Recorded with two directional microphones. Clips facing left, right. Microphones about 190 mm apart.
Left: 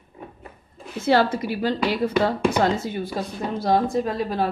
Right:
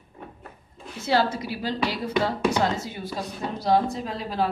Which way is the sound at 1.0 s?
55° left (ahead or behind).